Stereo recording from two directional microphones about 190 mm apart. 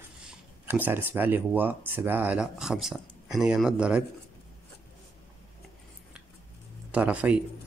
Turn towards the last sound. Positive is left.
turn(degrees=-5)  # may be behind; listen again after turning